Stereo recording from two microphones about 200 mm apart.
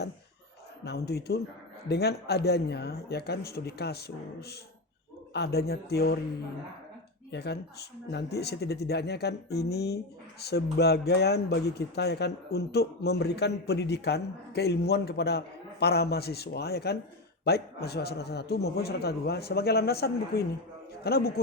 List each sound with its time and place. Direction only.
0.9 s a man's voice: 55° left (ahead or behind)
7.3 s a man's voice: 55° left (ahead or behind)